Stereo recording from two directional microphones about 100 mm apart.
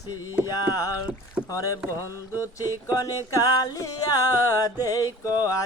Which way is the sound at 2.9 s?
35° left (ahead or behind).